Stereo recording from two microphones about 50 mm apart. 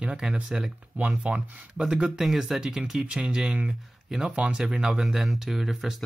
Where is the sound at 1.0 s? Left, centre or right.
Right.